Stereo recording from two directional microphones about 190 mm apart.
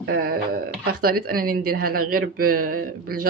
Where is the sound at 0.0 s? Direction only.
55° right (ahead or behind).